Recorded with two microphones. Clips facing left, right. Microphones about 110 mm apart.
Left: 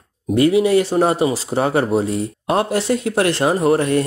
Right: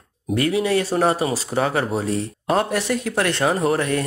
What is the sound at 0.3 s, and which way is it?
Speech, 25° left (ahead or behind).